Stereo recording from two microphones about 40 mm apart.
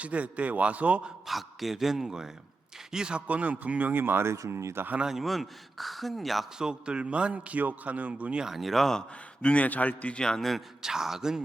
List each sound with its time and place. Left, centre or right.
0.0 s a man's voice: right
1.3 s speech: centre
2.0 s a man's voice: centre
3.2 s a man's voice: right
3.9 s speech: right
5.2 s speech: centre
6.6 s a man's voice: right
7.6 s a man's voice: right
8.4 s speech: centre
9.0 s a man's voice: left
9.6 s a man's voice: left
10.8 s speech: centre